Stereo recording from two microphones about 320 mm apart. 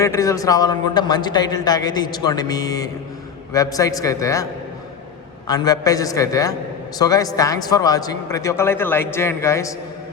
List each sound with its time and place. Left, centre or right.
0.0 s a man's voice: centre
5.5 s a man's voice: centre